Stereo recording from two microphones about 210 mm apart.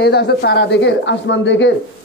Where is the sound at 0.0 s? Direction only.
50° left (ahead or behind).